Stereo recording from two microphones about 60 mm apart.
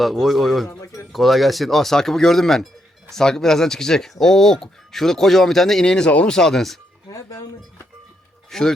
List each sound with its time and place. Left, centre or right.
0.0 s speech: centre
7.1 s speech: left
8.4 s speech: centre